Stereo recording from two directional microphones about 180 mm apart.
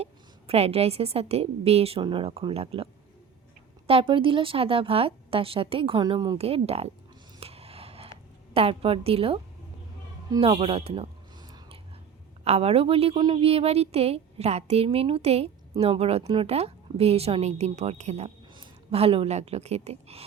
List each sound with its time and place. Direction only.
0.0 s a woman's voice: 35° right (ahead or behind)
7.3 s a sound: 35° right (ahead or behind)
8.5 s a woman's voice: 30° right (ahead or behind)
10.2 s speech: 20° right (ahead or behind)
10.5 s a sound: 35° right (ahead or behind)
12.5 s a woman's voice: 35° right (ahead or behind)